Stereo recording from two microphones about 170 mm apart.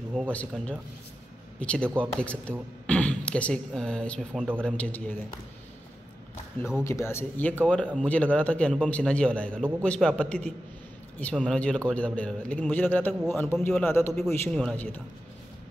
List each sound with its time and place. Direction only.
0.3 s a man's voice: 10° left (ahead or behind)
6.8 s a man's voice: 15° left (ahead or behind)